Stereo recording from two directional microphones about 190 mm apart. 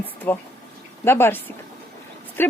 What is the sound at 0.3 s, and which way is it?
Speech, 10° left (ahead or behind).